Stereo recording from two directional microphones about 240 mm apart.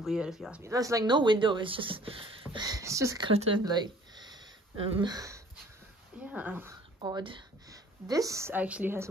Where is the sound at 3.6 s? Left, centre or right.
Centre.